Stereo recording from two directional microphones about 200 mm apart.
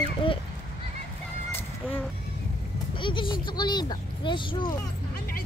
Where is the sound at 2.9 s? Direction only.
25° left (ahead or behind).